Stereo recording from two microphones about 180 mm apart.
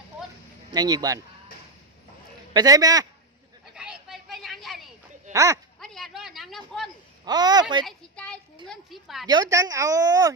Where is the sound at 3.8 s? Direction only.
5° right (ahead or behind).